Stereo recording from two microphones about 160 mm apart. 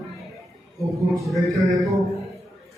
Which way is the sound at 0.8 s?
20° right (ahead or behind).